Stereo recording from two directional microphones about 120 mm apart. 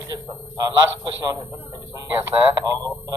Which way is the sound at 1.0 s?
35° right (ahead or behind).